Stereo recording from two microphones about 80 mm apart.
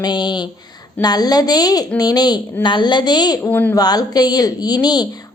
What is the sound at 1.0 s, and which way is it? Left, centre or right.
A woman's voice, left.